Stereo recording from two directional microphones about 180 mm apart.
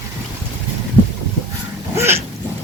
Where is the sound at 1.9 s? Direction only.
15° right (ahead or behind).